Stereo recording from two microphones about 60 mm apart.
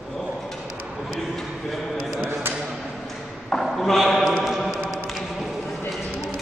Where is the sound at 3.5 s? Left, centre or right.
Centre.